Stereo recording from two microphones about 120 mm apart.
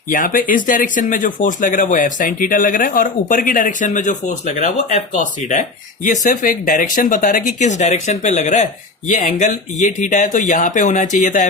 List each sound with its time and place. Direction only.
0.5 s speech: 90° left
9.0 s speech: 90° left